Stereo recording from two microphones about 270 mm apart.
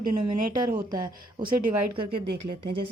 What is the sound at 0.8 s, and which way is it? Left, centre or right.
Speech, centre.